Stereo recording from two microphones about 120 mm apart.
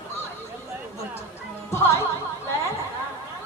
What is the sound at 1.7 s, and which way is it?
Speech, 20° left (ahead or behind).